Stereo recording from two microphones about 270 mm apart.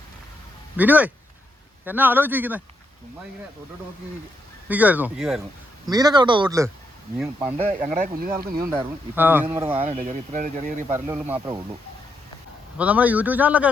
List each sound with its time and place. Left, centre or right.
0.8 s a man's voice: centre
4.7 s a man's voice: centre
5.9 s a man's voice: centre
7.5 s speech: right
8.7 s speech: centre
9.7 s speech: right
10.8 s speech: centre
12.7 s a man's voice: centre